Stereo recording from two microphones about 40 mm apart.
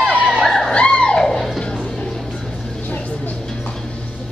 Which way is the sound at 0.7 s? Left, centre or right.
Left.